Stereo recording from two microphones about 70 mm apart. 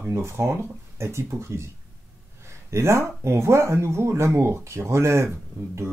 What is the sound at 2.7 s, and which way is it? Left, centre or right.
Speech, right.